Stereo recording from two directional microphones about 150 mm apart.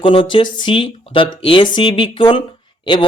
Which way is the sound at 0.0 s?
35° left (ahead or behind).